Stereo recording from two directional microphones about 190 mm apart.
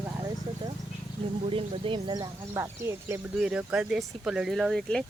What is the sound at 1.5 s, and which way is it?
Speech, 30° right (ahead or behind).